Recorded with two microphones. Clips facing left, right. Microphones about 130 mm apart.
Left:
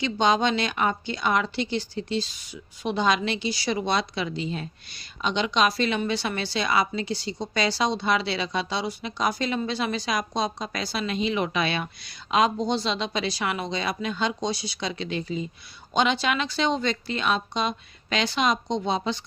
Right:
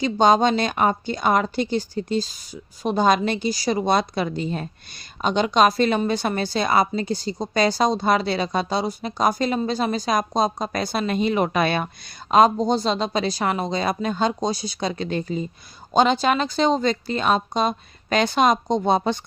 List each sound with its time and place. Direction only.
0.0 s a woman's voice: 40° right (ahead or behind)